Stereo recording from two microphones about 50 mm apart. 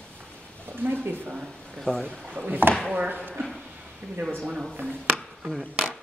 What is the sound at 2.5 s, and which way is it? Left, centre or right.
Speech, right.